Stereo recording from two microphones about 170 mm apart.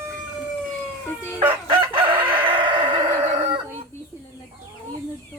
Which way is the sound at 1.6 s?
30° right (ahead or behind).